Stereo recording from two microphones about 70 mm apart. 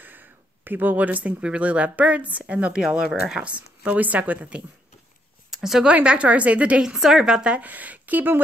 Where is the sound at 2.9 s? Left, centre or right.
Centre.